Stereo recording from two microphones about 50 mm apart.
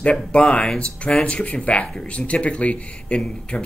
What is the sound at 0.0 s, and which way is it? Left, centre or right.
Speech, left.